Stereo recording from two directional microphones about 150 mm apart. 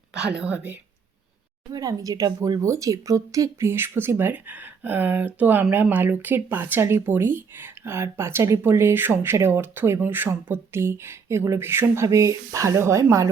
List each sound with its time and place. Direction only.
0.3 s speech: 10° right (ahead or behind)
1.7 s speech: 25° right (ahead or behind)